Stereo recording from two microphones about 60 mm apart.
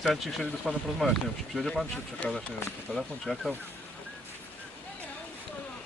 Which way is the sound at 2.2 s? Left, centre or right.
Left.